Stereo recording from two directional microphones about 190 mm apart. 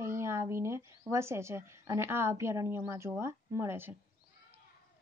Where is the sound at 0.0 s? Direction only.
15° right (ahead or behind).